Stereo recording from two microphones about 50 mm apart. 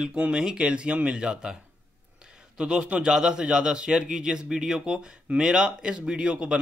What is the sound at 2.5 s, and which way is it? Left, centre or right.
A man's voice, centre.